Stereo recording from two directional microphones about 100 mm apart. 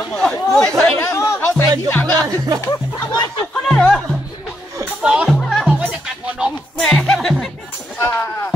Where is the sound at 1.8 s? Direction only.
15° left (ahead or behind).